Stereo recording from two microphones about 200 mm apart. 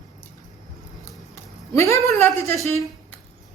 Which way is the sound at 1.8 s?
15° left (ahead or behind).